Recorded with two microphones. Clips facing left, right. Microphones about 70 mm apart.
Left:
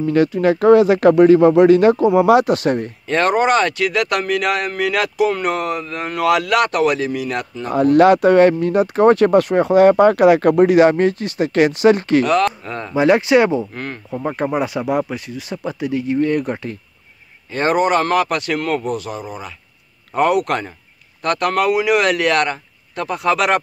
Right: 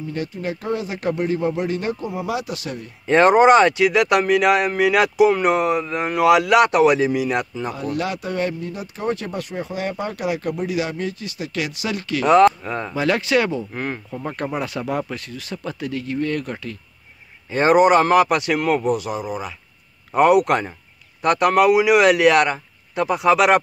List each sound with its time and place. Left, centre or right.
0.0 s speech: left
3.1 s speech: centre
7.7 s speech: left
10.8 s speech: left
12.4 s speech: centre
12.9 s speech: left
17.5 s speech: centre